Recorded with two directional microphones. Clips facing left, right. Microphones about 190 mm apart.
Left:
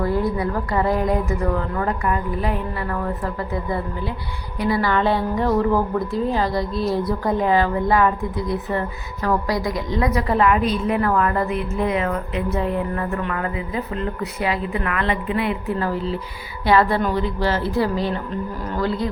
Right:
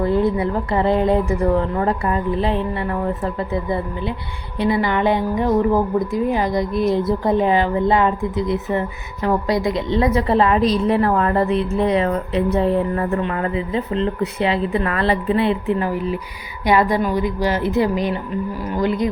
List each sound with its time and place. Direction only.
0.0 s a woman's voice: 25° right (ahead or behind)
15.9 s a woman's voice: 15° right (ahead or behind)